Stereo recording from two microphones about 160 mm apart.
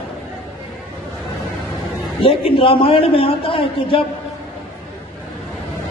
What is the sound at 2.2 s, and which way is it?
A man's voice, 35° left (ahead or behind).